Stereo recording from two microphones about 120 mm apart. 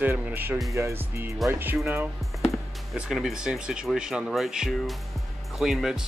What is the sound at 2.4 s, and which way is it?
Speech, centre (ahead or behind).